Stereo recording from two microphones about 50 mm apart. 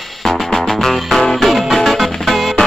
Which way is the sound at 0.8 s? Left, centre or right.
Centre.